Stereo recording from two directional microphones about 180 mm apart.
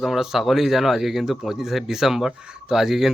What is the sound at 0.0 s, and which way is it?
Speech, centre (ahead or behind).